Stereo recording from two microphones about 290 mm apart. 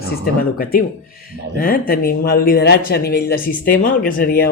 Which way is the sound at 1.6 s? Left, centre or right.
Left.